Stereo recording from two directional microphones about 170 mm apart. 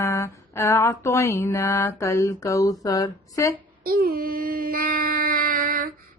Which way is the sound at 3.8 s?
60° right (ahead or behind).